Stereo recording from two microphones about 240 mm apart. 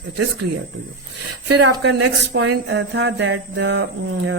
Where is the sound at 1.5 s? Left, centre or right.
Right.